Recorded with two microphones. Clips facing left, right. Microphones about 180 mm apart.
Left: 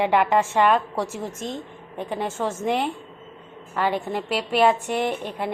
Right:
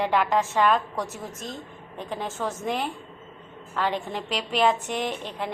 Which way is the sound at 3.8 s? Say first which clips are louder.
Left 3 dB; 10° left (ahead or behind).